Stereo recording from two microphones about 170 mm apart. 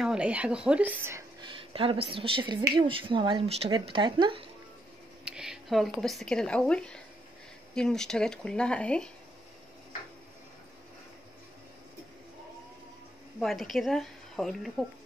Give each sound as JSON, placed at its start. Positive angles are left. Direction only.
{"t": 0.0, "sound": "speech", "side_deg": -5}
{"t": 1.4, "sound": "speech", "side_deg": -30}
{"t": 5.2, "sound": "speech", "side_deg": -5}
{"t": 13.4, "sound": "speech", "side_deg": 0}